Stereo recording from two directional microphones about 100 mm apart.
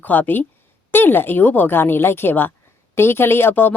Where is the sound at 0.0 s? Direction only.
20° left (ahead or behind).